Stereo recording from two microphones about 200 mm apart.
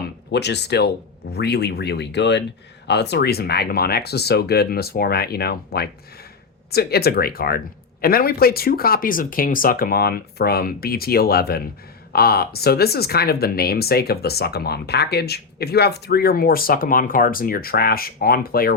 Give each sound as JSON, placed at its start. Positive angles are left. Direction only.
{"t": 0.0, "sound": "speech", "side_deg": 55}